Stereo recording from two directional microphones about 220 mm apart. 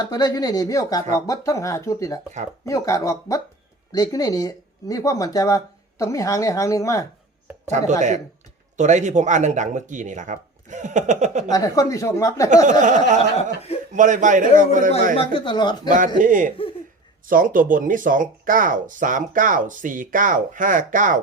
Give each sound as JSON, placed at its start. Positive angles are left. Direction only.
{"t": 0.1, "sound": "speech", "side_deg": 15}
{"t": 7.7, "sound": "speech", "side_deg": -35}
{"t": 11.5, "sound": "speech", "side_deg": 15}
{"t": 12.8, "sound": "speech", "side_deg": -35}
{"t": 15.1, "sound": "speech", "side_deg": 25}
{"t": 16.1, "sound": "speech", "side_deg": -35}